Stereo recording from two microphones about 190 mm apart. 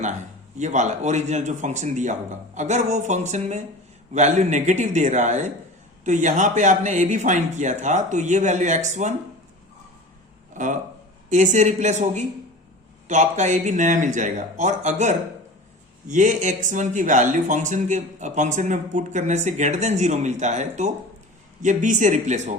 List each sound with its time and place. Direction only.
0.6 s speech: 40° right (ahead or behind)
10.5 s a man's voice: 40° right (ahead or behind)